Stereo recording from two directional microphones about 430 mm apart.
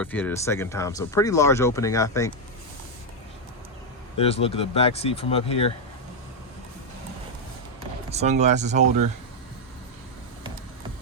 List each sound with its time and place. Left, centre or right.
0.0 s speech: centre
4.2 s speech: centre
8.1 s speech: centre